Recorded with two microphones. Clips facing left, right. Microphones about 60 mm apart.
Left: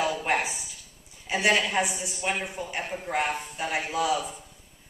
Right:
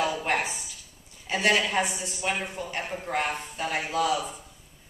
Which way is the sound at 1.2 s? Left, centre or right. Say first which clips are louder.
Even; centre.